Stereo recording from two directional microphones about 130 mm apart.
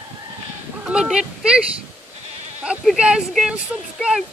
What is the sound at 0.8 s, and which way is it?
Speech, 5° right (ahead or behind).